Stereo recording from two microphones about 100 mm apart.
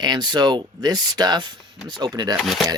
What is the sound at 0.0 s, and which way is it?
Speech, 45° right (ahead or behind).